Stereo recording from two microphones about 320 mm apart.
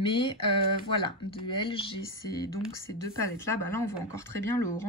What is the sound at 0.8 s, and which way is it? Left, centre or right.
Speech, centre.